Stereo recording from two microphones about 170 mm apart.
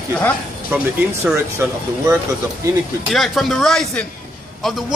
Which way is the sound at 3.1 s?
Centre (ahead or behind).